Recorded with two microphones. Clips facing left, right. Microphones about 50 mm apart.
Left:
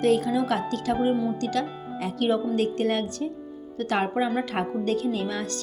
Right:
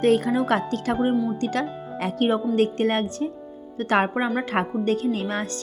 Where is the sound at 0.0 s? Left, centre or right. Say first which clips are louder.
Right 2 dB; right.